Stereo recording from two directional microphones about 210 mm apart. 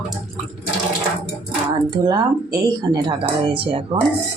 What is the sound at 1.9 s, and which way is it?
Speech, 20° right (ahead or behind).